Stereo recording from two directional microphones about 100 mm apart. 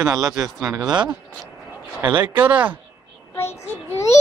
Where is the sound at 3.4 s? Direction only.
25° left (ahead or behind).